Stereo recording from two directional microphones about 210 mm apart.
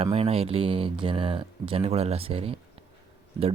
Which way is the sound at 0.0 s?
30° right (ahead or behind).